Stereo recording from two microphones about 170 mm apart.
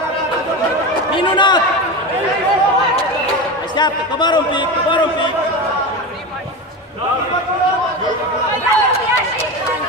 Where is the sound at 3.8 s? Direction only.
25° left (ahead or behind).